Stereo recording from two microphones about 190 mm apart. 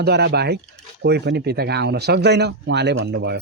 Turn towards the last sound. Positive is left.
turn(degrees=-60)  # may be behind; listen again after turning